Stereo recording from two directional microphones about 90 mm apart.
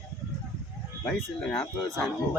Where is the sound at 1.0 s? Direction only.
10° left (ahead or behind).